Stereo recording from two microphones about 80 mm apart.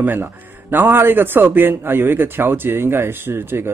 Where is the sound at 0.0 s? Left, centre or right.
Right.